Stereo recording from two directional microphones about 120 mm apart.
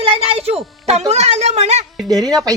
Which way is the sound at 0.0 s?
55° right (ahead or behind).